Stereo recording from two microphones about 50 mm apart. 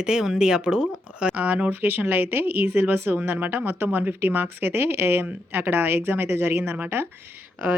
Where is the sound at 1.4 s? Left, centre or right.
Right.